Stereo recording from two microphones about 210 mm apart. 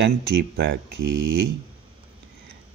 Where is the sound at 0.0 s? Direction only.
55° right (ahead or behind).